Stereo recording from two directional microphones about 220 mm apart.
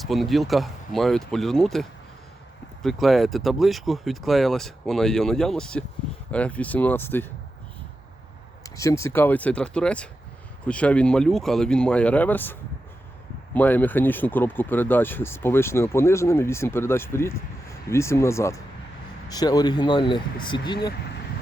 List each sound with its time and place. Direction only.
0.0 s speech: centre (ahead or behind)
8.6 s speech: 15° left (ahead or behind)